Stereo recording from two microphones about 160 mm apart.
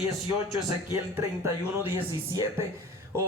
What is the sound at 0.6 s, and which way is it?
Speech, 20° right (ahead or behind).